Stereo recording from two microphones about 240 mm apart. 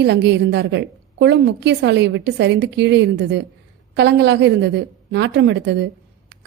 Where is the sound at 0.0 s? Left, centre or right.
Right.